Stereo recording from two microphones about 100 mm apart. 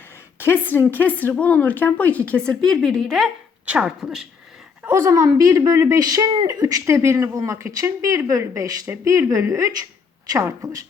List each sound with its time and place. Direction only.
0.3 s a woman's voice: 20° left (ahead or behind); by 3.2 s 5° left (ahead or behind)
3.7 s speech: 10° right (ahead or behind)
4.9 s speech: 25° right (ahead or behind)